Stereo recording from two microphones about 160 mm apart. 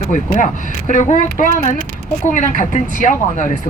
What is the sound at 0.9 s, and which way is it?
Speech, 50° left (ahead or behind).